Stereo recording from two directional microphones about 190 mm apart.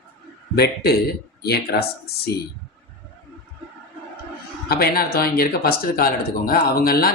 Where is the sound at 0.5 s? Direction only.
55° left (ahead or behind).